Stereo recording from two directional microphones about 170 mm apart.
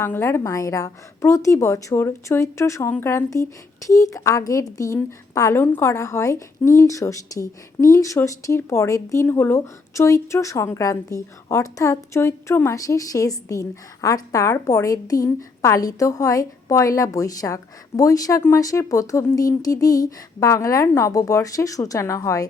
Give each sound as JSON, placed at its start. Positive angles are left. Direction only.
{"t": 0.0, "sound": "a woman's voice", "side_deg": 15}